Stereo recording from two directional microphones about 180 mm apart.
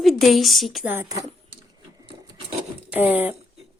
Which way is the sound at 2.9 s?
10° right (ahead or behind).